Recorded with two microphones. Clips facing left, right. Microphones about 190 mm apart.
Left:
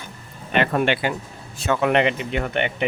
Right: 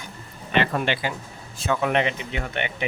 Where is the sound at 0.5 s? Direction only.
55° left (ahead or behind).